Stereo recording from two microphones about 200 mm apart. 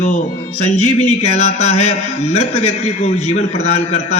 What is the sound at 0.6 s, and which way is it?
A man's voice, 35° left (ahead or behind).